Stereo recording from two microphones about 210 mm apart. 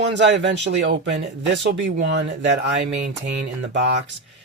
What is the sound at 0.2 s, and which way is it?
Speech, 55° right (ahead or behind).